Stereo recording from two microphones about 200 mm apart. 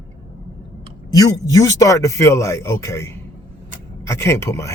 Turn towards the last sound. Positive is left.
turn(degrees=15)  # may be behind; listen again after turning